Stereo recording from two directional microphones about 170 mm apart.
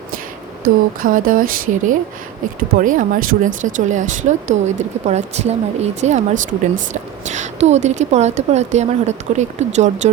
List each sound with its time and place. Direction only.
0.6 s speech: 55° right (ahead or behind)